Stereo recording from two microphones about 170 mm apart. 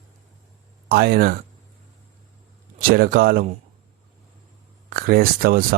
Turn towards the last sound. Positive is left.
turn(degrees=-55)  # may be behind; listen again after turning